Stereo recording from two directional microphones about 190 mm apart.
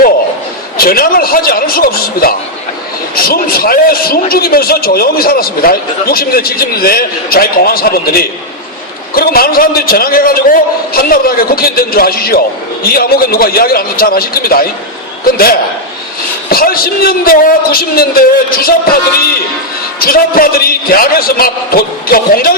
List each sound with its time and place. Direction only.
0.8 s a man's voice: 50° left (ahead or behind)
20.0 s a man's voice: 50° left (ahead or behind)